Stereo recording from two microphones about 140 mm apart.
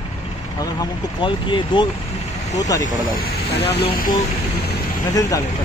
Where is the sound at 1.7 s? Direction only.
35° left (ahead or behind).